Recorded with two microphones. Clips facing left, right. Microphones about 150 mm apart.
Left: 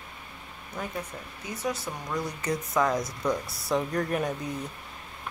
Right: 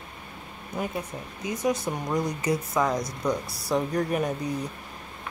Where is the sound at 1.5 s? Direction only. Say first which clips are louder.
Right 6 dB; 15° right (ahead or behind).